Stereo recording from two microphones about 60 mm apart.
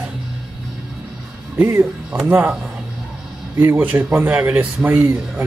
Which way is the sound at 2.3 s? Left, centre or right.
Right.